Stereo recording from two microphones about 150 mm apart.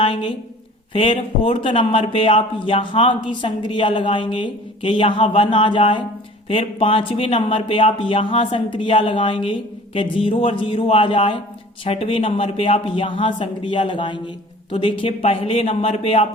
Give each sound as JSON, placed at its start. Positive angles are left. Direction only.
{"t": 0.0, "sound": "a woman's voice", "side_deg": 35}